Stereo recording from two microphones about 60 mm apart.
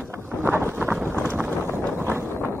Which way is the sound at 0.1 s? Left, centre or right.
Right.